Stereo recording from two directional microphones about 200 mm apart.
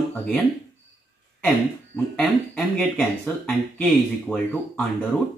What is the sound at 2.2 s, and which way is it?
Speech, centre (ahead or behind).